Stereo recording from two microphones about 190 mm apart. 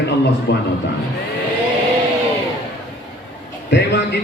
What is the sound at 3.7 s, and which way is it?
Speech, 65° left (ahead or behind).